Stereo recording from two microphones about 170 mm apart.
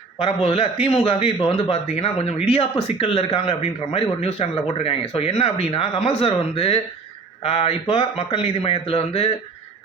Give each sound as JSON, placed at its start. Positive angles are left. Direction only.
{"t": 0.2, "sound": "a man's voice", "side_deg": 35}